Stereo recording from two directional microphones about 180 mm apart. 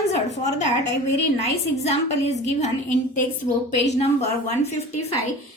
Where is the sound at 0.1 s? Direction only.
40° left (ahead or behind).